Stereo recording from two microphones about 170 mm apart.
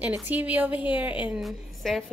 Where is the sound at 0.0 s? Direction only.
10° right (ahead or behind).